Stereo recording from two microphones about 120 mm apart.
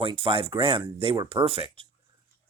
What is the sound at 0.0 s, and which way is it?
Speech, 50° right (ahead or behind).